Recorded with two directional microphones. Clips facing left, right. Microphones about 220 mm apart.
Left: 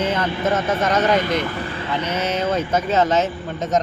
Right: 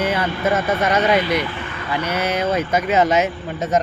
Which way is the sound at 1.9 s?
10° right (ahead or behind).